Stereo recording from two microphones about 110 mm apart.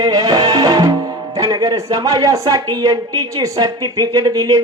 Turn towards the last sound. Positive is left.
turn(degrees=-35)  # may be behind; listen again after turning